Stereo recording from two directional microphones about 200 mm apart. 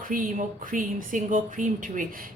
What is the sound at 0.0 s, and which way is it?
Speech, 45° right (ahead or behind).